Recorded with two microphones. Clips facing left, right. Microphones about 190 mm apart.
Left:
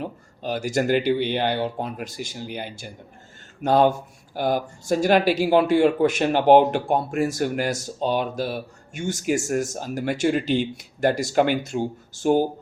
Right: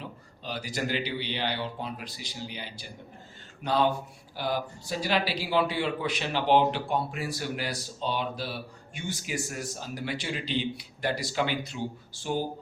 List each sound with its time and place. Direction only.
0.0 s speech: 50° left (ahead or behind)